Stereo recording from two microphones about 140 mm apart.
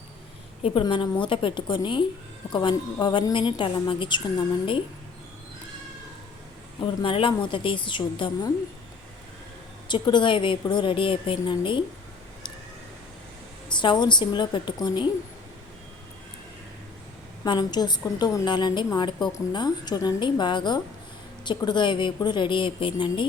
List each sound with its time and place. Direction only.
0.6 s a woman's voice: 35° left (ahead or behind)
7.0 s a woman's voice: 35° left (ahead or behind)
9.9 s a woman's voice: 35° left (ahead or behind)
13.7 s a woman's voice: 35° left (ahead or behind)
17.4 s a woman's voice: 30° left (ahead or behind)